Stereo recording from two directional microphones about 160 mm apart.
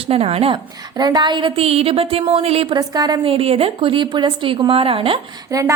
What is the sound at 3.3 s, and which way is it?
A woman's voice, 35° right (ahead or behind).